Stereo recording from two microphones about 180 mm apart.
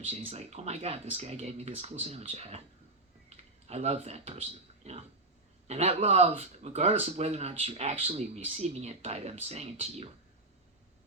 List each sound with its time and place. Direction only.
0.1 s speech: 35° right (ahead or behind)